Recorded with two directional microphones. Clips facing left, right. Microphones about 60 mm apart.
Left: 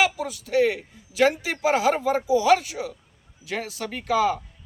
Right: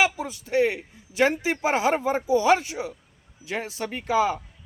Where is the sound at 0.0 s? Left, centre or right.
Right.